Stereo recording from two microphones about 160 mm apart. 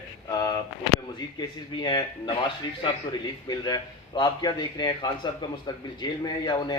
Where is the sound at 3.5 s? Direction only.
25° left (ahead or behind).